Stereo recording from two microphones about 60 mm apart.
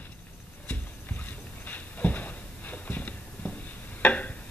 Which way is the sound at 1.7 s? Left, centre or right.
Left.